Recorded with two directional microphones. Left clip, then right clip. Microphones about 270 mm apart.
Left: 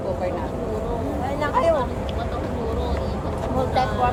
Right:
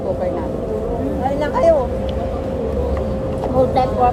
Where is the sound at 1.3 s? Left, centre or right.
Centre.